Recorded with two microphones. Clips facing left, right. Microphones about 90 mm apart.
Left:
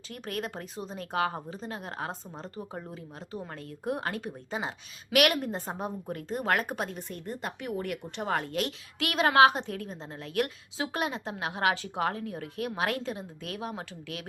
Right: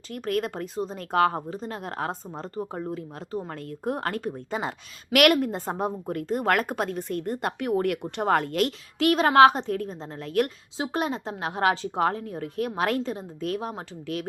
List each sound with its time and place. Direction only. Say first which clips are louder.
0.1 s a woman's voice: right 8 dB; 45° right (ahead or behind)
9.0 s a woman's voice: right 5 dB; 35° right (ahead or behind)
10.8 s a woman's voice: right 4 dB; 30° right (ahead or behind)